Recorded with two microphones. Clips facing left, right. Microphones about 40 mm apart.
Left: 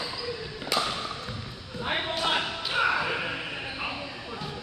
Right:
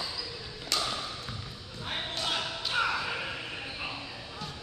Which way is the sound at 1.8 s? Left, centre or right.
Left.